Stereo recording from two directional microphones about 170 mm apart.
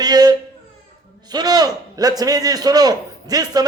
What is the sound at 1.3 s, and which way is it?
Speech, 25° right (ahead or behind).